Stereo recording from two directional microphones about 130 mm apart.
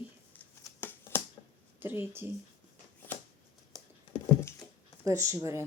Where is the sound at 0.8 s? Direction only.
15° left (ahead or behind).